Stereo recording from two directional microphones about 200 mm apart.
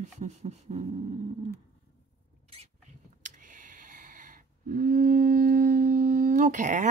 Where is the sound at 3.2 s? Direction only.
40° right (ahead or behind).